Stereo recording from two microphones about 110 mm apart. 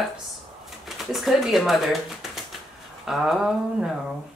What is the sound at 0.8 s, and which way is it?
Speech, centre (ahead or behind).